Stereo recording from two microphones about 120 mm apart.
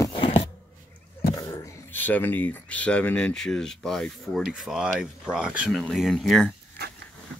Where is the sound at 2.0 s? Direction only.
15° left (ahead or behind); by 5.7 s 10° right (ahead or behind).